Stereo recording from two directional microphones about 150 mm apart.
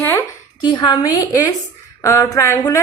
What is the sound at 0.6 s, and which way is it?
A woman's voice, 30° left (ahead or behind).